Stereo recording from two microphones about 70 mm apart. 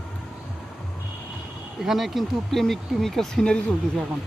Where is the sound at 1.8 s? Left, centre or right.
Centre.